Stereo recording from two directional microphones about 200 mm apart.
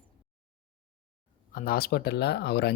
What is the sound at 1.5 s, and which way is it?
Speech, 45° left (ahead or behind).